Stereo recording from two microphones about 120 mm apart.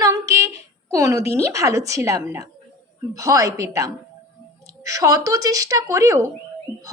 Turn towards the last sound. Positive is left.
turn(degrees=-25)  # may be behind; listen again after turning